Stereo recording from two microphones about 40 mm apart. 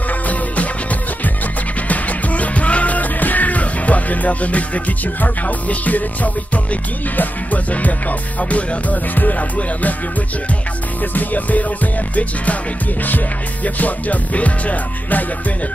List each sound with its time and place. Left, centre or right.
1.9 s music: left
11.1 s music: left
13.7 s music: left